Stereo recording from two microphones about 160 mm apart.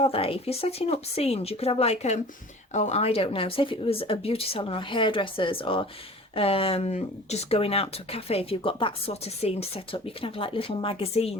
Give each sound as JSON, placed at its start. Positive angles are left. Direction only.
{"t": 0.0, "sound": "speech", "side_deg": 35}